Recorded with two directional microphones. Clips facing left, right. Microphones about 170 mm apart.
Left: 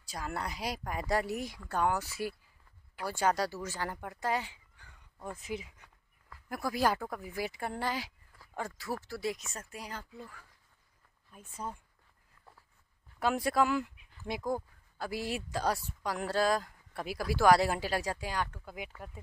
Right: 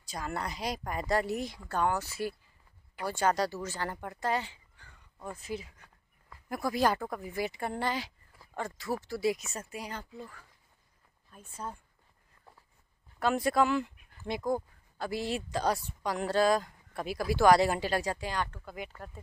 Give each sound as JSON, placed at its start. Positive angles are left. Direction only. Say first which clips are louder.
{"t": 0.0, "sound": "speech", "louder": "right 2 dB", "side_deg": 5}
{"t": 6.5, "sound": "speech", "louder": "right 2 dB", "side_deg": 5}
{"t": 11.3, "sound": "speech", "louder": "even", "side_deg": 15}
{"t": 13.2, "sound": "speech", "louder": "right 2 dB", "side_deg": 5}